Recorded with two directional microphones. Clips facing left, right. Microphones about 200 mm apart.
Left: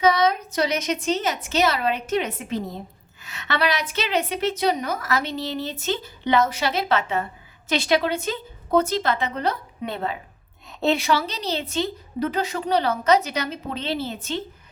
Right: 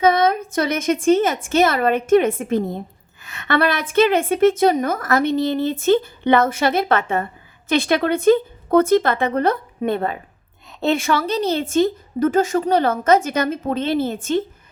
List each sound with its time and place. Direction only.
0.0 s a woman's voice: 50° right (ahead or behind)
10.7 s a woman's voice: centre (ahead or behind)
11.0 s a woman's voice: 50° right (ahead or behind)